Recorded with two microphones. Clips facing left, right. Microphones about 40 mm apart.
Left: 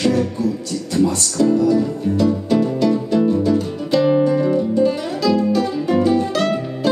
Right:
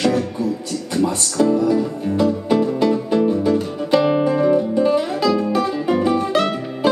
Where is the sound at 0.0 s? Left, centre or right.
Right.